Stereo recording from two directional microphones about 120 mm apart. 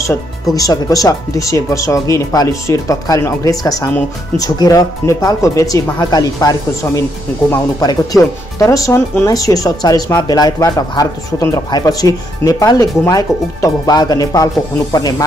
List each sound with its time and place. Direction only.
0.6 s speech: 30° left (ahead or behind)